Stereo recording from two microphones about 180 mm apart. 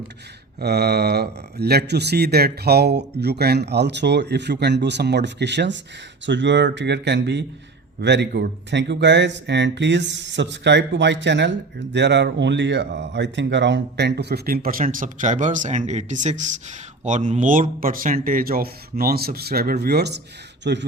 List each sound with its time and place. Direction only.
0.6 s speech: 65° right (ahead or behind)